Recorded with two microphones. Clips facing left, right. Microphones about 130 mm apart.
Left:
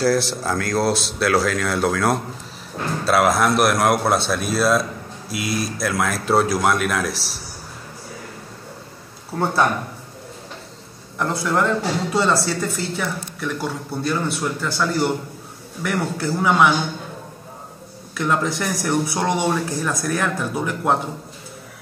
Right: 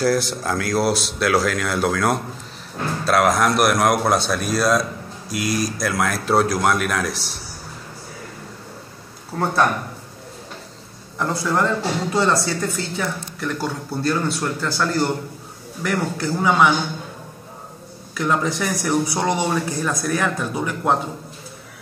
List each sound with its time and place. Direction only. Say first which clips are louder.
0.0 s speech: left 1 dB; centre (ahead or behind)
9.3 s speech: left 1 dB; 5° left (ahead or behind)
11.1 s speech: even; centre (ahead or behind)
18.1 s speech: even; centre (ahead or behind)